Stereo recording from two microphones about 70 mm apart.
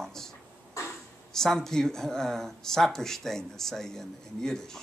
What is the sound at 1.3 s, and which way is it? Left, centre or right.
Speech, centre.